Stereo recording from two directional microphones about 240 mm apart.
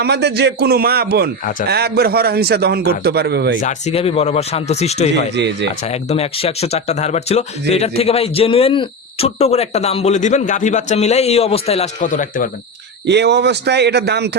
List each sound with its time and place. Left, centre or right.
0.0 s a man's voice: right
3.6 s speech: left
5.3 s speech: right
5.8 s speech: left
13.1 s speech: right